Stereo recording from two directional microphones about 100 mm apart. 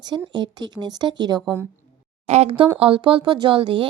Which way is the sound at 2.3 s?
85° right.